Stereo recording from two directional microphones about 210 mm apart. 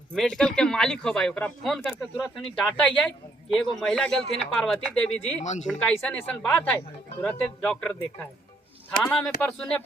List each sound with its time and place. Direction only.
0.1 s speech: 5° left (ahead or behind)
5.4 s speech: 35° left (ahead or behind)
5.6 s speech: 5° left (ahead or behind)
9.4 s speech: 5° left (ahead or behind)